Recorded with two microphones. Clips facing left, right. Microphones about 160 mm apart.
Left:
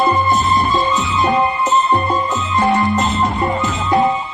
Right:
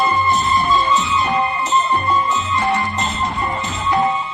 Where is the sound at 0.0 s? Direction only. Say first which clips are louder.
Left 2 dB; 45° left (ahead or behind).